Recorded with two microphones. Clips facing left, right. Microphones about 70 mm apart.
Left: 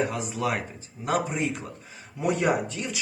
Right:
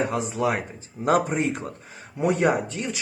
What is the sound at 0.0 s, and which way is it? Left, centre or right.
Speech, right.